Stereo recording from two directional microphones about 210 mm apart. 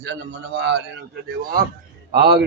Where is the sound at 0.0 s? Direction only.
55° right (ahead or behind).